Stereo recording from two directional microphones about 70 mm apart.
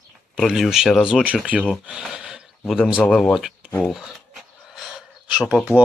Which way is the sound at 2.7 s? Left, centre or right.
Centre.